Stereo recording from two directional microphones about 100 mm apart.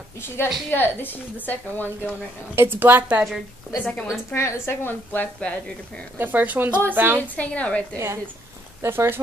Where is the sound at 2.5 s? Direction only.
20° right (ahead or behind).